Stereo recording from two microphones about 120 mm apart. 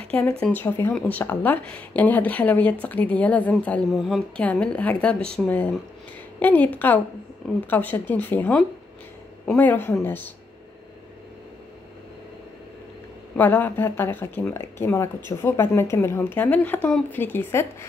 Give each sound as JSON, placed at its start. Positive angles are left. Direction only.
{"t": 0.3, "sound": "speech", "side_deg": 10}
{"t": 3.9, "sound": "a woman's voice", "side_deg": 0}
{"t": 13.4, "sound": "speech", "side_deg": 15}